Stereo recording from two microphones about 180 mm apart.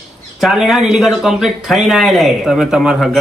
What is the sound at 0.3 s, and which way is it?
Speech, centre (ahead or behind).